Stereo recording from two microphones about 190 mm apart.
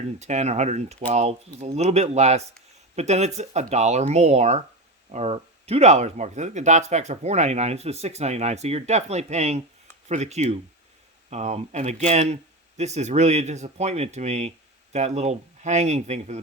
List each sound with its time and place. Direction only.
0.2 s speech: 35° right (ahead or behind)